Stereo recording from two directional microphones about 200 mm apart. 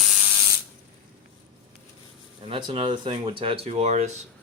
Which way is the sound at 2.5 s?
25° right (ahead or behind).